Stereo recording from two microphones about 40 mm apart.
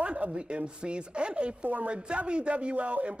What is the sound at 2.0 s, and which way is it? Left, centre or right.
Speech, right.